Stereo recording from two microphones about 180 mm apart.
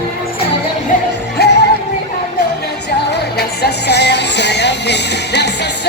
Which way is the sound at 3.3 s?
65° left (ahead or behind).